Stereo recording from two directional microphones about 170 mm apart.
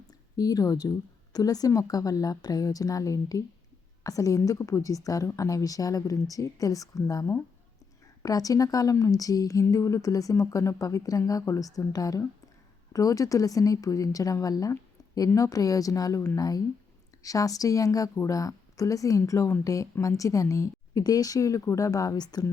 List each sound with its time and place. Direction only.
0.1 s a woman's voice: 20° left (ahead or behind)